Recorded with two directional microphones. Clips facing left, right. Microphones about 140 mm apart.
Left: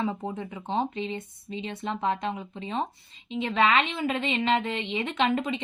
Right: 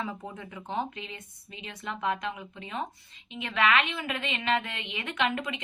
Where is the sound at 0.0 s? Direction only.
30° left (ahead or behind).